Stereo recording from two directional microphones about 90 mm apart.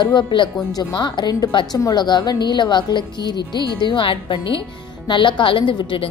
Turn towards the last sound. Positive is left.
turn(degrees=65)  # may be behind; listen again after turning